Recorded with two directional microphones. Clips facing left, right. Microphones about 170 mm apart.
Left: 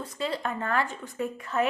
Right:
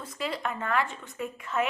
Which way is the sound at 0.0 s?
30° left (ahead or behind).